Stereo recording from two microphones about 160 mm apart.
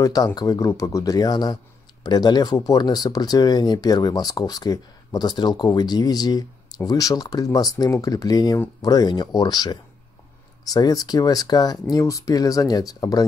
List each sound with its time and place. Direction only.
0.0 s speech: 25° left (ahead or behind)